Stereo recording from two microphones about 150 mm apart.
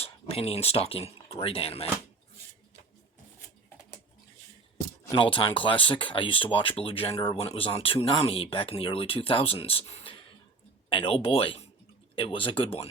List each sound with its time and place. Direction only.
0.0 s speech: 40° left (ahead or behind)
5.1 s speech: 35° left (ahead or behind)